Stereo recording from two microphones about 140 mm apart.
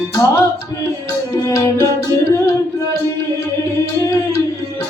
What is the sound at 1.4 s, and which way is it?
Music, 20° left (ahead or behind).